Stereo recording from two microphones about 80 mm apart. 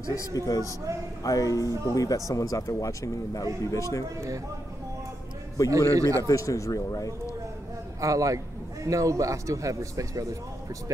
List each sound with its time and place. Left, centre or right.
0.0 s a man's voice: left
5.7 s speech: right
6.2 s speech: left
8.0 s speech: right